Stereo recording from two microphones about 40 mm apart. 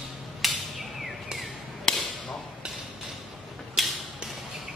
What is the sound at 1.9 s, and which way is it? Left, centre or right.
Hammer, centre.